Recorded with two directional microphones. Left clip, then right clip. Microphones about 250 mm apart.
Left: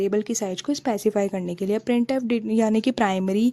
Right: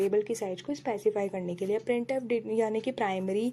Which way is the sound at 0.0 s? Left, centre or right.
Left.